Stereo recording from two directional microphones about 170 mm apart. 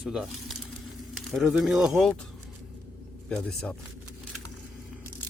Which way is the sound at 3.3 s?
5° left (ahead or behind).